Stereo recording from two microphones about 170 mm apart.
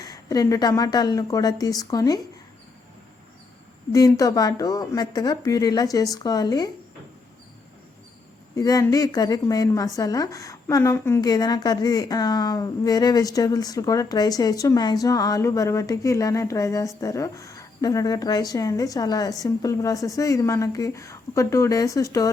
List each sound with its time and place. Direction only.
0.0 s a woman's voice: 20° left (ahead or behind)
3.9 s a woman's voice: 20° left (ahead or behind)
8.5 s a woman's voice: 20° left (ahead or behind)